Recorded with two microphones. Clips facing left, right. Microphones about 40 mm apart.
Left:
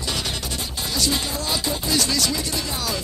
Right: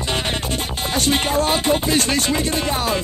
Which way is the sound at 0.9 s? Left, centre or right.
Right.